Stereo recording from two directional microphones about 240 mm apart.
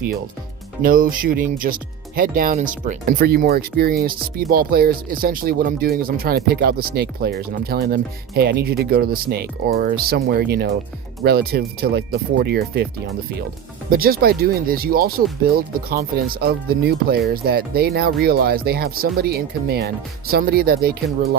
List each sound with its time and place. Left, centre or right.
0.8 s speech: right
13.9 s speech: right